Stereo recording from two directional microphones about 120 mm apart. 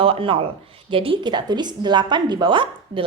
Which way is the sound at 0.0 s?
45° right (ahead or behind).